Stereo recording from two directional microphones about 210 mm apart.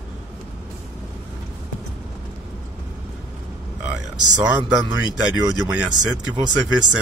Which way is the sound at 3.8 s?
5° right (ahead or behind).